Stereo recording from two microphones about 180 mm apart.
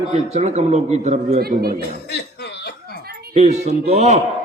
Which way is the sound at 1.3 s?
60° right (ahead or behind).